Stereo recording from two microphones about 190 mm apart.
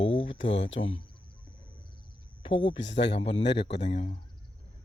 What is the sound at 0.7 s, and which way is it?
Speech, 90° left.